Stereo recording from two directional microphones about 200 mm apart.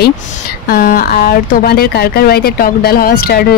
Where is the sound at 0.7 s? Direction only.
45° left (ahead or behind).